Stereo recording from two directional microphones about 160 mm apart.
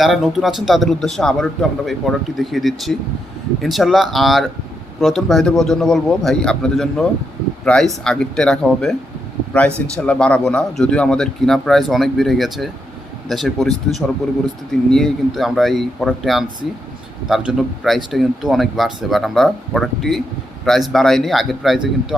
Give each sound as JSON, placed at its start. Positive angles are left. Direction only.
{"t": 0.0, "sound": "speech", "side_deg": 0}